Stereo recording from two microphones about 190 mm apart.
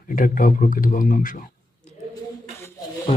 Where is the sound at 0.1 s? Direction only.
45° left (ahead or behind).